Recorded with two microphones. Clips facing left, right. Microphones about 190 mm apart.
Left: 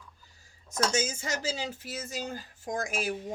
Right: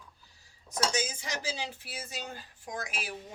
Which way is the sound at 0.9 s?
45° left (ahead or behind).